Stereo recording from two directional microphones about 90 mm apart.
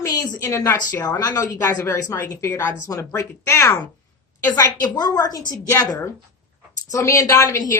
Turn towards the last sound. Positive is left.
turn(degrees=35)  # may be behind; listen again after turning